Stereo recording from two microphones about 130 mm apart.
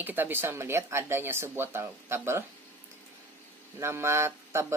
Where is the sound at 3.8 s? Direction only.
20° right (ahead or behind).